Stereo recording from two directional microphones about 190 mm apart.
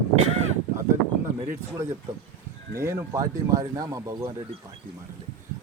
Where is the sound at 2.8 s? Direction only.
15° right (ahead or behind).